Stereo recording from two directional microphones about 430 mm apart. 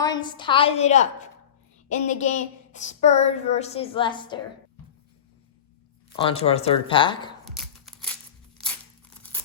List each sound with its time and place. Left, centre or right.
0.0 s speech: centre
6.1 s speech: centre
8.6 s crumpling: centre